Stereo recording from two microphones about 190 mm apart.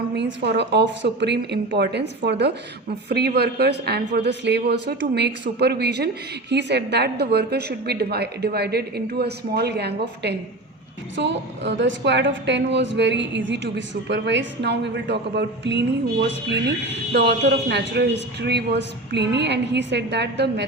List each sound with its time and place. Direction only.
0.2 s a woman's voice: 65° right (ahead or behind)